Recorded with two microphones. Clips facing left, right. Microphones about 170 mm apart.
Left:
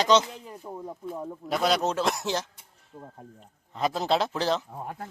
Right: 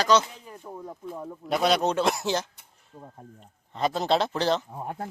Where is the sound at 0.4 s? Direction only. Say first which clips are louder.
Left 1 dB; 5° left (ahead or behind).